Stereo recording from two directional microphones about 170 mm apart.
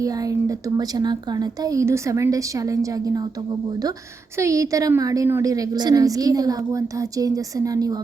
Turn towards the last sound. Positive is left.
turn(degrees=-20)  # may be behind; listen again after turning